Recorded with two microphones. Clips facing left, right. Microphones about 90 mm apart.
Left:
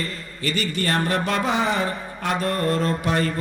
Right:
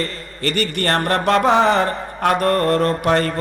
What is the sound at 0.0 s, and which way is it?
Speech, 60° right (ahead or behind).